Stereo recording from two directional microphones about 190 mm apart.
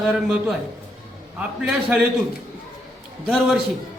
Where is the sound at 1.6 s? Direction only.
5° right (ahead or behind).